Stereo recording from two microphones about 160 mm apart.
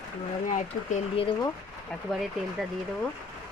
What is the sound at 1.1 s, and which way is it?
Speech, 35° left (ahead or behind).